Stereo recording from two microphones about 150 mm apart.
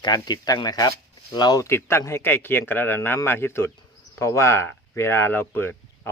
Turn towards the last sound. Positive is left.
turn(degrees=15)  # may be behind; listen again after turning